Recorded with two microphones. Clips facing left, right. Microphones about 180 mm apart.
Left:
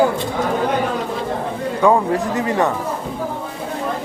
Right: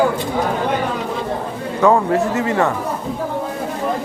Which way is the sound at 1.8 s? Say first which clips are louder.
Right 2 dB; 15° left (ahead or behind).